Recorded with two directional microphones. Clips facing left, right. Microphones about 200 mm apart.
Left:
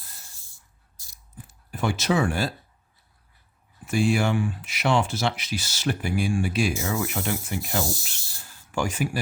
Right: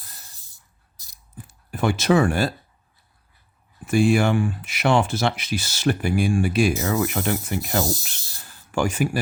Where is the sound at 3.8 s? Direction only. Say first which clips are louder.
Right 4 dB; 55° right (ahead or behind).